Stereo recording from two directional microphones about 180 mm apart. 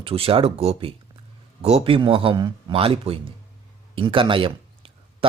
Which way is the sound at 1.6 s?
35° right (ahead or behind).